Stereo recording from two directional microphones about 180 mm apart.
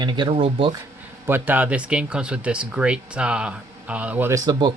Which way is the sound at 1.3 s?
10° right (ahead or behind).